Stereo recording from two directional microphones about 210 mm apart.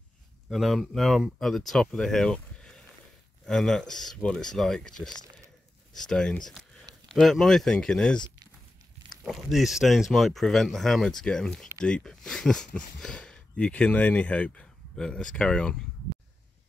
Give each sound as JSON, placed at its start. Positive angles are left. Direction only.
{"t": 0.5, "sound": "speech", "side_deg": 0}
{"t": 5.2, "sound": "a sound", "side_deg": -15}
{"t": 5.9, "sound": "speech", "side_deg": 5}
{"t": 9.2, "sound": "speech", "side_deg": 0}